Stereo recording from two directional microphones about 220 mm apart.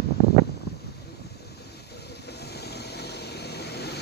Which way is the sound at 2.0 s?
50° left (ahead or behind).